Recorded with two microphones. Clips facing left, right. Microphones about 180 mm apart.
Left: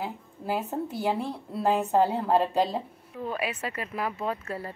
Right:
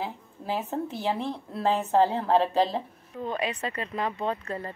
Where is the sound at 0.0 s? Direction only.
5° left (ahead or behind).